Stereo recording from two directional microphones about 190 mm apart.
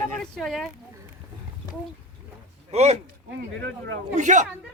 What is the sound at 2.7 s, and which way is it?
Speech, 35° right (ahead or behind).